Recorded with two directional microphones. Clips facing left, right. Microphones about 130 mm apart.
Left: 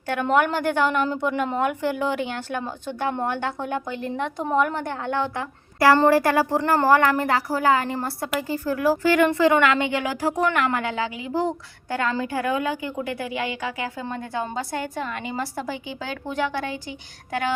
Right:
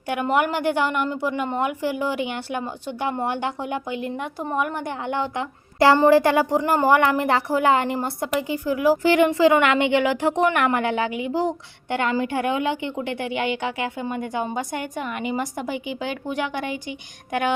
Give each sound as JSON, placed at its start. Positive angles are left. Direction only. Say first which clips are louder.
{"t": 0.1, "sound": "a woman's voice", "louder": "left 1 dB", "side_deg": -10}
{"t": 14.0, "sound": "speech", "louder": "right 2 dB", "side_deg": -15}